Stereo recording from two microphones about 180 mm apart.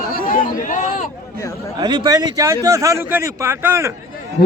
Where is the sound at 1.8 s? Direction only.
25° right (ahead or behind).